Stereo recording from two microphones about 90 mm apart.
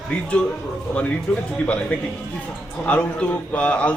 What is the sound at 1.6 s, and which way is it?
A man's voice, 15° left (ahead or behind).